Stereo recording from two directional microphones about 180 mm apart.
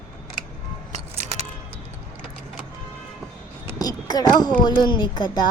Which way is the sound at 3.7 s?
20° left (ahead or behind).